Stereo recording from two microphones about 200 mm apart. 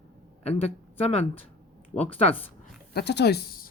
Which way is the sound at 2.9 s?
55° left (ahead or behind).